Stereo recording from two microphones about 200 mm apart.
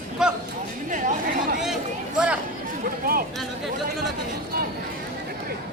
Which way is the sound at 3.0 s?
45° right (ahead or behind).